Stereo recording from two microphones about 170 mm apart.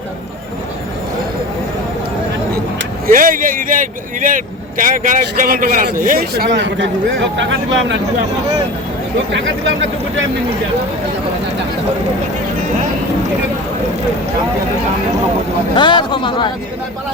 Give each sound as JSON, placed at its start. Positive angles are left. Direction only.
{"t": 3.1, "sound": "speech", "side_deg": -55}
{"t": 15.7, "sound": "a man's voice", "side_deg": 30}